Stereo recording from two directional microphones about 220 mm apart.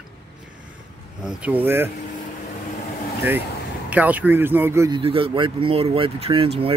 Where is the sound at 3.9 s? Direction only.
5° right (ahead or behind).